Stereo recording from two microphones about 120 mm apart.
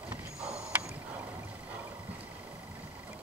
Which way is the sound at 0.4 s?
5° right (ahead or behind).